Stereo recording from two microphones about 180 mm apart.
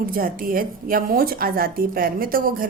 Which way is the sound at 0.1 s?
50° right (ahead or behind).